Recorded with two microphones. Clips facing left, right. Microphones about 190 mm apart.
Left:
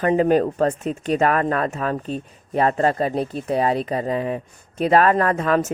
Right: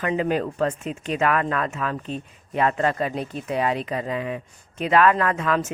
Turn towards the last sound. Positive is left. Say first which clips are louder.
# left 4 dB
turn(degrees=40)  # may be behind; listen again after turning